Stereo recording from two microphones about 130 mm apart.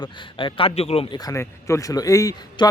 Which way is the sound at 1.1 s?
25° left (ahead or behind).